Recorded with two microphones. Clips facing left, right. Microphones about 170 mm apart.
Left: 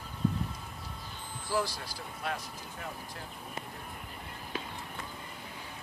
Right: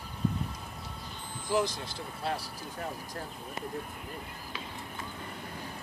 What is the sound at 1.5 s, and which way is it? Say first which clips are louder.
Speech: right 3 dB; 20° right (ahead or behind).